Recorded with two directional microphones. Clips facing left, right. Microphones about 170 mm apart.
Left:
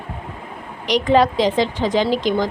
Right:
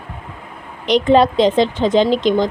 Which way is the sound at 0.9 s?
25° right (ahead or behind).